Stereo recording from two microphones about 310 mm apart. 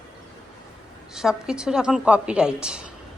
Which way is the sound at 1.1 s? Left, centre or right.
Centre.